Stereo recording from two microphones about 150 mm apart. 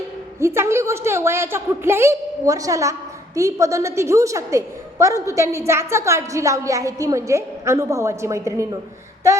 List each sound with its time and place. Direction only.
0.3 s a woman's voice: 15° right (ahead or behind)